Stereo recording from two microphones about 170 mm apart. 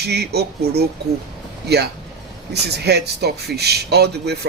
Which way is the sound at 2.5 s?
75° right (ahead or behind).